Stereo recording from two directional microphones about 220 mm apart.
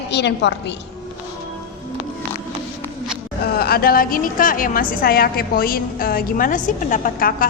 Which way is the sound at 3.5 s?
45° left (ahead or behind).